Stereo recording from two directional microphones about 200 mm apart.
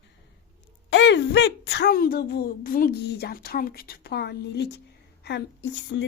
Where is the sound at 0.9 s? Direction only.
65° left (ahead or behind).